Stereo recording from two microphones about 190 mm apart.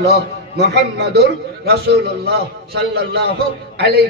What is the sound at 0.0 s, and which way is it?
A man's voice, 60° right (ahead or behind).